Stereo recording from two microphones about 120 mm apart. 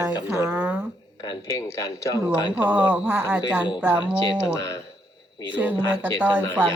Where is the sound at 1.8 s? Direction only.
25° left (ahead or behind).